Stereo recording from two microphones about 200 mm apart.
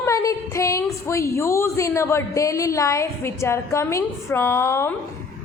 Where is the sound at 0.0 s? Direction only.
15° left (ahead or behind).